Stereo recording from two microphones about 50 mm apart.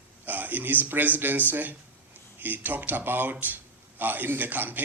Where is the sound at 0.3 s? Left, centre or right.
Right.